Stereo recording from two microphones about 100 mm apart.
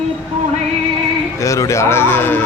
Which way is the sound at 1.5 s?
30° left (ahead or behind).